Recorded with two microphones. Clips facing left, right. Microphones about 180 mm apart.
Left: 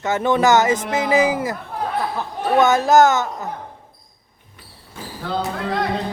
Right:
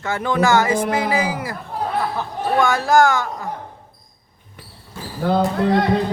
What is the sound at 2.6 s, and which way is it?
Speech, 20° left (ahead or behind).